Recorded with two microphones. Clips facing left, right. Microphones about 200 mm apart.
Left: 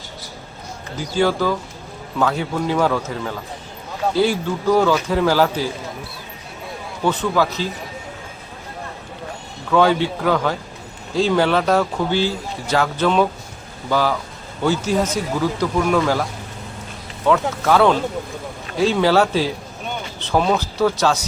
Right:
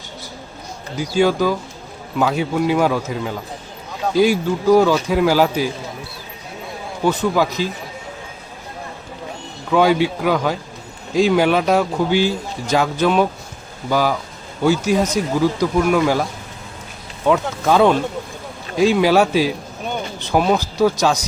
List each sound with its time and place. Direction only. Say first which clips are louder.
0.9 s speech: right 2 dB; 15° right (ahead or behind)
7.0 s speech: right 2 dB; 10° right (ahead or behind)
9.7 s speech: right 1 dB; 10° right (ahead or behind)
17.2 s speech: right 1 dB; 15° right (ahead or behind)